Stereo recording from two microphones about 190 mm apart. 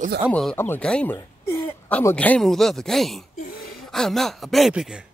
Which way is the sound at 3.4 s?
50° left (ahead or behind).